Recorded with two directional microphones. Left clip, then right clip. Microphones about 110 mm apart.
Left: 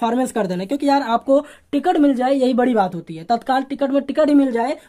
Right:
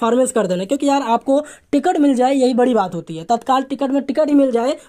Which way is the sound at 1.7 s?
40° right (ahead or behind).